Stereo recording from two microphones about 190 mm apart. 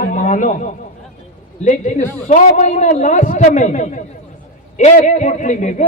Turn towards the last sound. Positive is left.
turn(degrees=40)  # may be behind; listen again after turning